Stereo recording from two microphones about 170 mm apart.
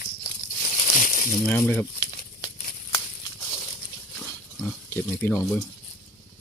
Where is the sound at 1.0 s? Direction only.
50° left (ahead or behind).